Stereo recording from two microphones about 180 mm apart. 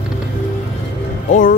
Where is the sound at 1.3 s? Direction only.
45° left (ahead or behind).